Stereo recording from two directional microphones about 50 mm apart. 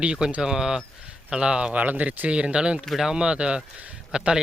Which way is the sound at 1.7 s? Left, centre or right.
Right.